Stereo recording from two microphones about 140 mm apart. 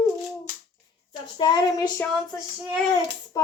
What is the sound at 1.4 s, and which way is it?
Speech, 30° left (ahead or behind).